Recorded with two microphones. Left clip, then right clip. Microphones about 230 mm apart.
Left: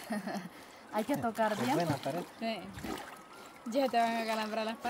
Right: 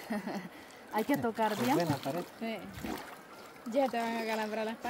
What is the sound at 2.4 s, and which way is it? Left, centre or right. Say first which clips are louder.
Speech: left 4 dB; left.